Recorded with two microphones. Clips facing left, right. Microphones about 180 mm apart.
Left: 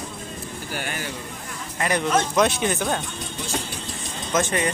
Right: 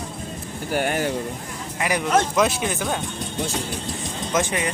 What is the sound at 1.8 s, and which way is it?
Speech, 5° right (ahead or behind).